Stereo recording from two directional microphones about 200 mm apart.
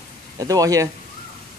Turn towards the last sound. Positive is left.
turn(degrees=-15)  # may be behind; listen again after turning